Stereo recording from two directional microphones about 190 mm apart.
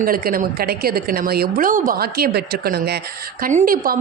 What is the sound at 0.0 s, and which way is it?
A man's voice, 50° right (ahead or behind).